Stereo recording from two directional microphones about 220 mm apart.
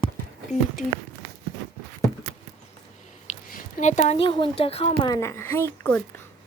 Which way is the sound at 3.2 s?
35° left (ahead or behind).